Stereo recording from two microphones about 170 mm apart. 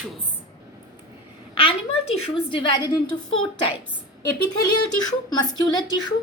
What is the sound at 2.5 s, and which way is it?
Speech, 25° left (ahead or behind).